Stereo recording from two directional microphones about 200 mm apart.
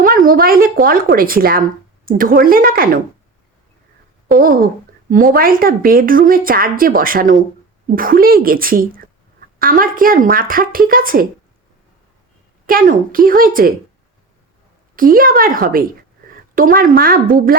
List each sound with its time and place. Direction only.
0.0 s speech: 45° right (ahead or behind)
4.4 s speech: 45° right (ahead or behind)
12.6 s speech: 45° right (ahead or behind)
14.9 s speech: 45° right (ahead or behind)